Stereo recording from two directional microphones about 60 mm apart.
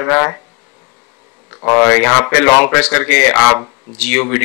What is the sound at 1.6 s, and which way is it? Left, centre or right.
Speech, left.